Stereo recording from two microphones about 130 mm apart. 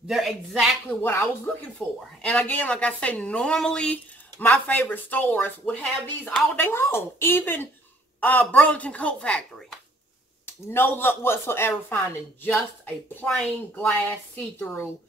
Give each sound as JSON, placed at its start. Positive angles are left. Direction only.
{"t": 0.1, "sound": "a woman's voice", "side_deg": 0}
{"t": 1.0, "sound": "a woman's voice", "side_deg": 20}
{"t": 1.8, "sound": "a woman's voice", "side_deg": 0}
{"t": 10.7, "sound": "a woman's voice", "side_deg": 15}